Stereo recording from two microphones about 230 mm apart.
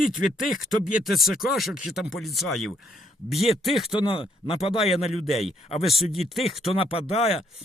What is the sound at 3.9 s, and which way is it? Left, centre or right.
Speech, left.